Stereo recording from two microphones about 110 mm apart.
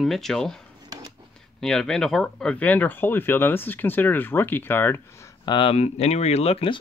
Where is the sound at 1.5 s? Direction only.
5° left (ahead or behind).